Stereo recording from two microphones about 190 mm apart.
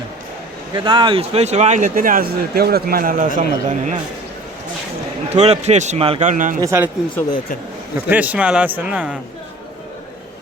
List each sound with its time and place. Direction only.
0.7 s speech: 25° right (ahead or behind); by 3.9 s 45° right (ahead or behind)
5.3 s speech: 35° right (ahead or behind)
6.6 s a man's voice: 15° right (ahead or behind)
8.1 s a man's voice: 10° right (ahead or behind)